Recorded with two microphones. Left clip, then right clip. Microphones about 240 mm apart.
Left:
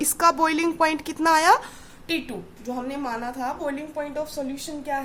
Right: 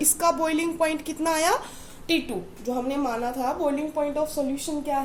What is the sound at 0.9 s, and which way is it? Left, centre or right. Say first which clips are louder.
Speech: left 5 dB; left.